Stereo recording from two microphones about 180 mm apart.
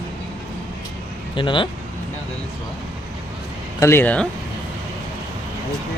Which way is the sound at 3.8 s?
10° left (ahead or behind).